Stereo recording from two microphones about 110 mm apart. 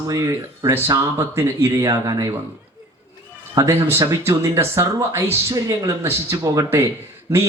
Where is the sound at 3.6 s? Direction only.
25° right (ahead or behind).